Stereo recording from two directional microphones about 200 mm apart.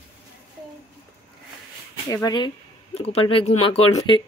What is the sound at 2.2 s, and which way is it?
Speech, 25° left (ahead or behind).